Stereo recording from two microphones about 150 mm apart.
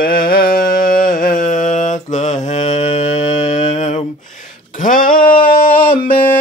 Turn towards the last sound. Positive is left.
turn(degrees=65)  # may be behind; listen again after turning